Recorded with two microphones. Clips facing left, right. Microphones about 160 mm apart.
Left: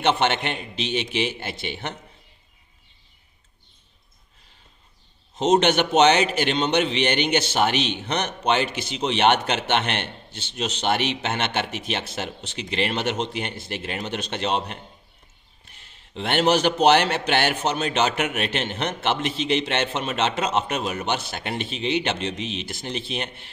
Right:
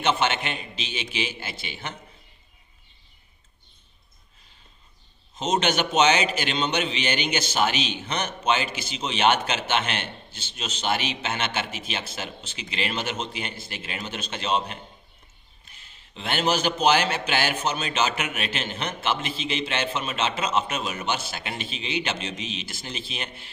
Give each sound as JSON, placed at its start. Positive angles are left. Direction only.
{"t": 0.0, "sound": "a man's voice", "side_deg": 60}
{"t": 5.3, "sound": "a man's voice", "side_deg": 65}
{"t": 16.1, "sound": "a man's voice", "side_deg": 65}